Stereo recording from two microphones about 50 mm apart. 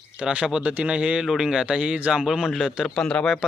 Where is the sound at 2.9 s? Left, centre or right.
Centre.